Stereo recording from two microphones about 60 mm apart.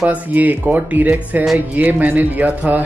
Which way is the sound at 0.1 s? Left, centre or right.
Right.